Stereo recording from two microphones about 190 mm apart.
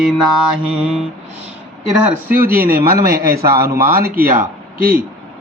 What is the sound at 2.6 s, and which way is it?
Speech, 50° right (ahead or behind).